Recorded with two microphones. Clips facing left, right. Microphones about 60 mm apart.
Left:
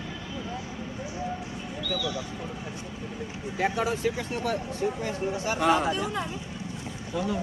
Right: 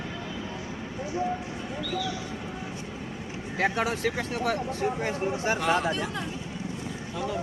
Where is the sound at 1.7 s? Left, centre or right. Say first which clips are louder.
Left 1 dB; right.